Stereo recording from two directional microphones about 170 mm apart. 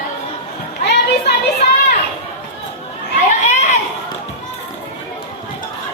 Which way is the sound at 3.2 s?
45° left (ahead or behind).